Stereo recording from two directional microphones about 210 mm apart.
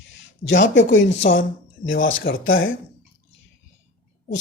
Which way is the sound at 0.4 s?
60° left (ahead or behind).